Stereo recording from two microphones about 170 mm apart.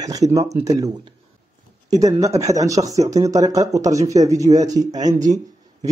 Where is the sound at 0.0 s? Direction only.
20° right (ahead or behind).